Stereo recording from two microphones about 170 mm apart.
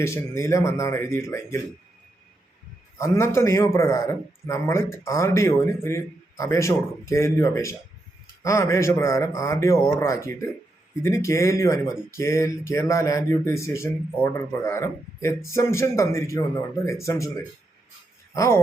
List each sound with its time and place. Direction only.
0.0 s a man's voice: 15° left (ahead or behind)
3.0 s a man's voice: 15° left (ahead or behind)